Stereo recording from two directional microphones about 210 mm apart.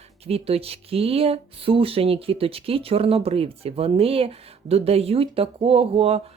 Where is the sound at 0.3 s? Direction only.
30° right (ahead or behind).